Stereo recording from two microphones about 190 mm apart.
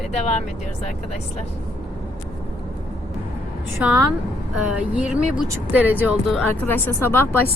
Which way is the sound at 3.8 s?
5° right (ahead or behind).